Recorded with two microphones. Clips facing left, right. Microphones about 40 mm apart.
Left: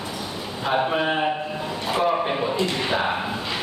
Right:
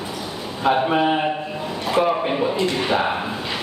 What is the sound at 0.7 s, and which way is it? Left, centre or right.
Speech, centre.